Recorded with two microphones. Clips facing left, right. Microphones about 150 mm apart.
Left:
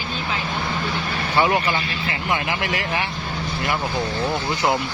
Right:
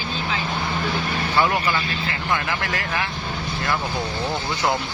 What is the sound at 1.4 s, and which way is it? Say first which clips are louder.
Speech: left 2 dB; 20° left (ahead or behind).